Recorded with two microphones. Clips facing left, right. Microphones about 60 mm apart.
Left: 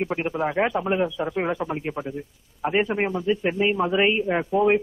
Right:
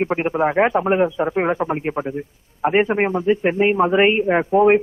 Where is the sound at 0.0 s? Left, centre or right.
Right.